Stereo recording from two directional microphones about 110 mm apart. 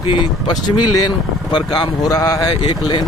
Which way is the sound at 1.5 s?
45° left (ahead or behind).